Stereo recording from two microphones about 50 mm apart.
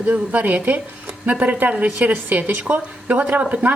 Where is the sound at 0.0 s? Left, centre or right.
Right.